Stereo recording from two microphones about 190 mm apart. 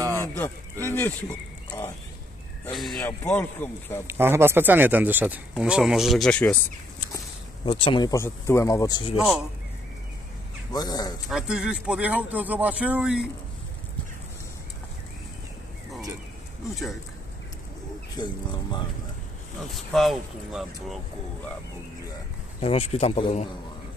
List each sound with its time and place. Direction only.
0.2 s a sound: 10° left (ahead or behind)
2.7 s speech: centre (ahead or behind)
4.1 s speech: 10° right (ahead or behind); by 6.6 s 5° left (ahead or behind)
7.6 s speech: 30° left (ahead or behind)
10.7 s speech: 20° left (ahead or behind)
11.2 s speech: 5° right (ahead or behind)
18.1 s speech: 25° left (ahead or behind)
19.7 s speech: centre (ahead or behind)
22.6 s speech: 35° left (ahead or behind)